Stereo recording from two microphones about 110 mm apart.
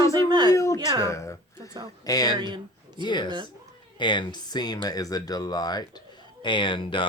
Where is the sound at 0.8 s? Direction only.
35° right (ahead or behind).